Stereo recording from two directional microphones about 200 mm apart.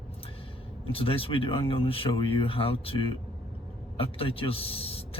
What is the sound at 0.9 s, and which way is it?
A man's voice, 30° left (ahead or behind).